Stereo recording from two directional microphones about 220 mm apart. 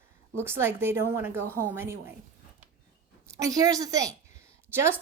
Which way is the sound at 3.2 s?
15° right (ahead or behind).